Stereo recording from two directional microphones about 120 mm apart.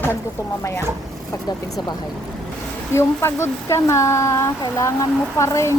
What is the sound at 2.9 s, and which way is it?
Speech, 20° left (ahead or behind).